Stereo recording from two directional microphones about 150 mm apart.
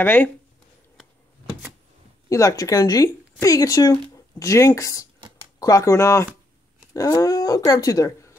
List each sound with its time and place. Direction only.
0.0 s speech: 10° left (ahead or behind)
2.2 s a woman's voice: 20° left (ahead or behind)